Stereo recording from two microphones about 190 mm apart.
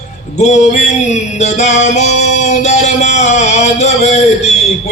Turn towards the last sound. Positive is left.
turn(degrees=35)  # may be behind; listen again after turning